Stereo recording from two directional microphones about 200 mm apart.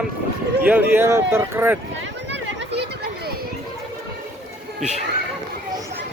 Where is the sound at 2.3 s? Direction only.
55° right (ahead or behind).